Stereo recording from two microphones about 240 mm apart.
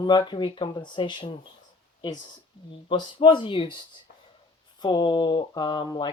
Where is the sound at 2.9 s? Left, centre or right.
Centre.